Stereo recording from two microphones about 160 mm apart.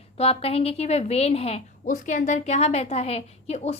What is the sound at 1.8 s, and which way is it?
A woman's voice, 55° left (ahead or behind).